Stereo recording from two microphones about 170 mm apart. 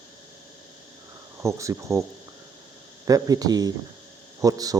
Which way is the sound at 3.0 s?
20° right (ahead or behind).